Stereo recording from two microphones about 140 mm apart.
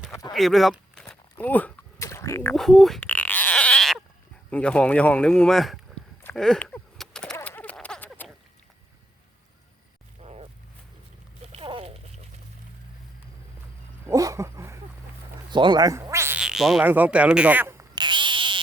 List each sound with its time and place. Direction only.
0.1 s speech: 25° left (ahead or behind)
0.3 s a sound: centre (ahead or behind); by 2.6 s 20° left (ahead or behind)
2.6 s sheep: centre (ahead or behind)
4.5 s a man's voice: 10° left (ahead or behind)
6.3 s a sound: 5° left (ahead or behind)
10.2 s a sound: 45° right (ahead or behind)
11.5 s a sound: 40° right (ahead or behind)
14.1 s dog: 25° right (ahead or behind)
15.4 s cat: 35° right (ahead or behind)
16.4 s frog: 5° right (ahead or behind)
16.8 s speech: 10° right (ahead or behind)
17.9 s frog: 35° right (ahead or behind)